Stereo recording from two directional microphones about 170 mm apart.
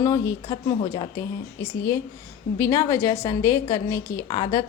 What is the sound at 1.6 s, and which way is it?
A woman's voice, 15° left (ahead or behind).